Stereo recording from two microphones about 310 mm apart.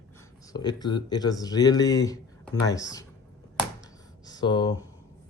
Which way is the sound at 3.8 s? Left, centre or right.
Centre.